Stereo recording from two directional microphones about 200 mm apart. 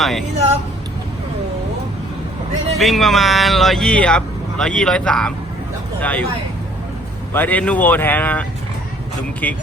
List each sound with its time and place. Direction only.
0.0 s speech: centre (ahead or behind)
2.7 s speech: centre (ahead or behind)
7.3 s speech: 10° left (ahead or behind)